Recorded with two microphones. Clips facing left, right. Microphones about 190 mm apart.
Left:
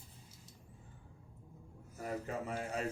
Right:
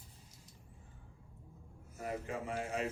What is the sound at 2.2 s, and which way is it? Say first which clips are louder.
Speech: even; 40° left (ahead or behind).